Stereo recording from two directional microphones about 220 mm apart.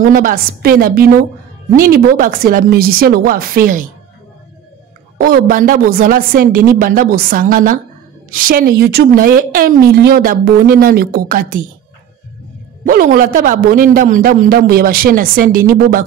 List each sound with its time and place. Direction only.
0.0 s a man's voice: 40° right (ahead or behind)
5.2 s a man's voice: 40° right (ahead or behind)
12.8 s a man's voice: 40° right (ahead or behind)